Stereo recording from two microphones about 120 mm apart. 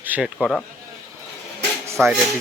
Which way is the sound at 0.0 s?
15° right (ahead or behind).